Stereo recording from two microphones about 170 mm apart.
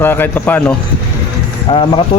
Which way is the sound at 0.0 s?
10° left (ahead or behind).